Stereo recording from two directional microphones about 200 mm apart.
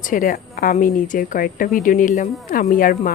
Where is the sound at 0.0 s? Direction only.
40° left (ahead or behind).